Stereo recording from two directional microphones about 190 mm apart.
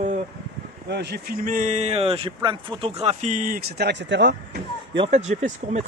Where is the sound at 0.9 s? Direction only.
60° right (ahead or behind).